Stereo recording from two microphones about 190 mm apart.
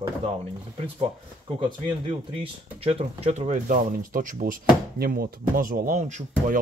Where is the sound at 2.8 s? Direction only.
30° right (ahead or behind).